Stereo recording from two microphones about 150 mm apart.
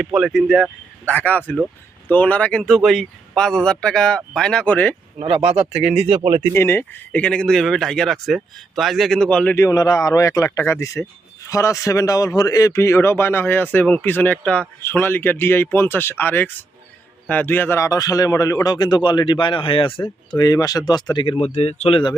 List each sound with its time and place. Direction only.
0.0 s speech: 5° right (ahead or behind)
5.2 s speech: 40° right (ahead or behind)
5.7 s speech: 5° right (ahead or behind)
6.0 s speech: 45° right (ahead or behind)
6.5 s speech: 15° left (ahead or behind)
9.6 s a man's voice: 25° left (ahead or behind)
20.3 s speech: 25° left (ahead or behind)